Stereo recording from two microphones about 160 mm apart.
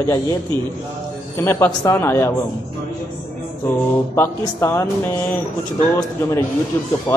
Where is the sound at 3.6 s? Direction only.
15° left (ahead or behind).